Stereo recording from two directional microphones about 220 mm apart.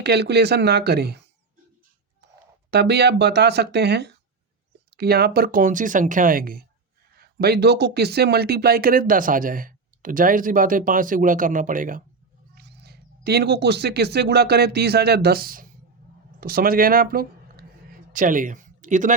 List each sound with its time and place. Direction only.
0.0 s speech: 50° right (ahead or behind)
2.2 s a sound: 50° right (ahead or behind)
2.6 s speech: 50° right (ahead or behind)
12.5 s speech: 50° right (ahead or behind)